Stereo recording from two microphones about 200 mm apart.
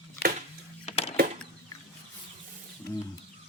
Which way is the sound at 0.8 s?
30° left (ahead or behind).